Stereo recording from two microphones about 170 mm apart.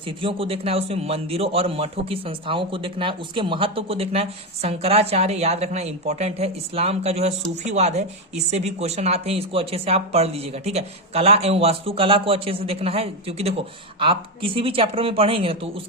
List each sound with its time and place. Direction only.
0.2 s a man's voice: 30° right (ahead or behind)